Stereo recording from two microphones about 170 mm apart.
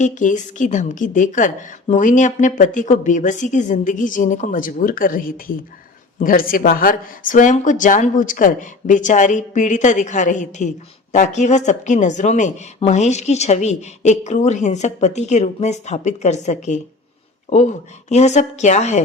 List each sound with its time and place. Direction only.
0.0 s speech: 50° left (ahead or behind)
17.5 s speech: 35° left (ahead or behind)